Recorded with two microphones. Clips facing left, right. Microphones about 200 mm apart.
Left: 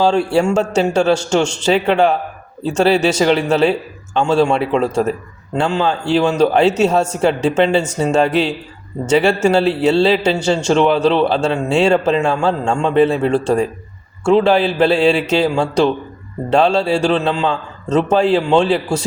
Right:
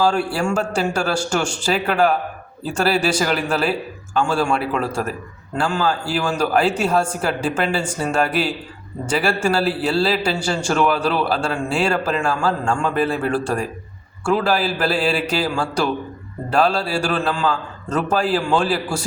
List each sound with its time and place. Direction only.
0.0 s a man's voice: 25° left (ahead or behind)